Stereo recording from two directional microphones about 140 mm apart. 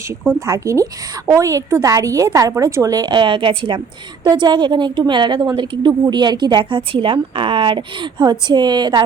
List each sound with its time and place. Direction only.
0.3 s a woman's voice: 25° right (ahead or behind)